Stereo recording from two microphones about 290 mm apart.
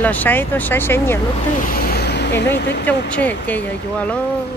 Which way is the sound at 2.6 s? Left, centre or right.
Left.